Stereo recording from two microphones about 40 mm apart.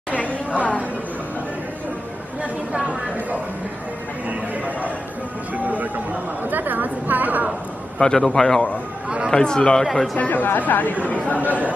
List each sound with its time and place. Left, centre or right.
0.1 s chatter: left
2.7 s a sound: right
5.7 s a sound: right
6.5 s a woman's voice: right
8.0 s speech: centre
10.3 s speech: left